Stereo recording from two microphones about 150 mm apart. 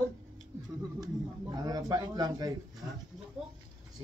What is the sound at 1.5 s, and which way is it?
A man's voice, 25° right (ahead or behind).